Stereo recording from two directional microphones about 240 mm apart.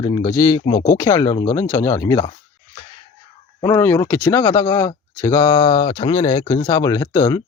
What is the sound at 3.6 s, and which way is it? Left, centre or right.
Speech, centre.